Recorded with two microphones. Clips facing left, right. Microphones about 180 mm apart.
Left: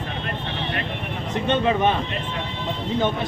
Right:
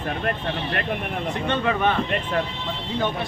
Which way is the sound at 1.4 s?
20° left (ahead or behind).